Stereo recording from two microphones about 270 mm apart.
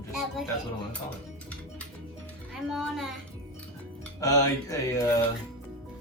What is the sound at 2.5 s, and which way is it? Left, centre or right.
Speech, centre.